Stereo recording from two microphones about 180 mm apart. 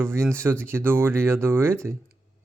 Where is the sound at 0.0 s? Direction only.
15° right (ahead or behind).